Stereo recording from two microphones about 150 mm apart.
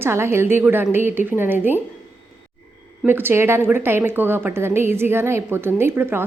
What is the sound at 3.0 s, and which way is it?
A woman's voice, 15° right (ahead or behind).